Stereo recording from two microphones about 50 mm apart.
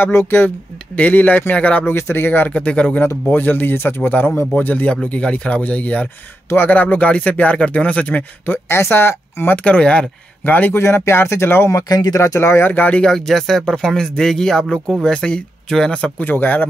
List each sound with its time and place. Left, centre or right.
0.1 s speech: left
0.9 s speech: left
1.9 s speech: left
2.4 s speech: left
3.3 s speech: left
3.7 s speech: left
5.0 s speech: left
8.6 s speech: left
9.6 s speech: left
10.7 s speech: left
12.1 s speech: left
12.7 s speech: left
13.0 s speech: centre
16.3 s speech: left